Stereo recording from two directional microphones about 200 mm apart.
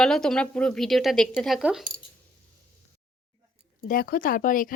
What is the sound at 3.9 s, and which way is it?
Speech, 45° left (ahead or behind).